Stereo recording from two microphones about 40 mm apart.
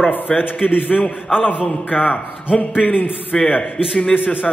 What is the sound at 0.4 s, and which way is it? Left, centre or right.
Speech, left.